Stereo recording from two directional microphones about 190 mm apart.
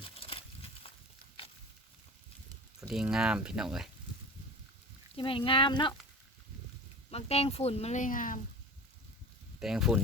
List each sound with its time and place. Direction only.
0.0 s a sound: 30° left (ahead or behind)
2.9 s speech: 5° right (ahead or behind)
5.1 s speech: 30° left (ahead or behind)
7.1 s speech: 35° left (ahead or behind)
9.6 s speech: centre (ahead or behind)